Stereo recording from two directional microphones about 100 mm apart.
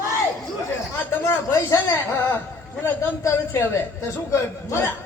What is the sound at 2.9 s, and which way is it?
A man's voice, 30° left (ahead or behind).